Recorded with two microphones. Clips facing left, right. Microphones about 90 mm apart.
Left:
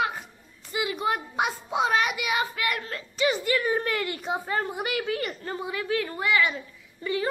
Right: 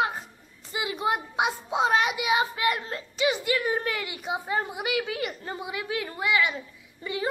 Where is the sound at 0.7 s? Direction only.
25° right (ahead or behind).